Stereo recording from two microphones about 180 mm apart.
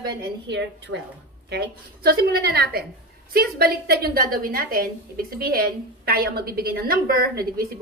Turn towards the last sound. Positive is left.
turn(degrees=-55)  # may be behind; listen again after turning